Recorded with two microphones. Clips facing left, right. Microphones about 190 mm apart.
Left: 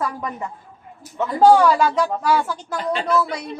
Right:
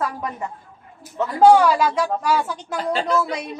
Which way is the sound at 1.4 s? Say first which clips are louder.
Even; 10° right (ahead or behind).